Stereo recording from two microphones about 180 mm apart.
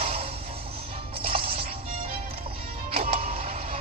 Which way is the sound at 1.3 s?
30° right (ahead or behind).